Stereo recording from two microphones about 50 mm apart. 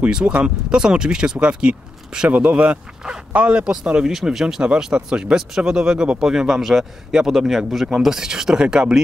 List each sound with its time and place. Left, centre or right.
0.0 s speech: right; by 6.9 s centre
7.1 s speech: centre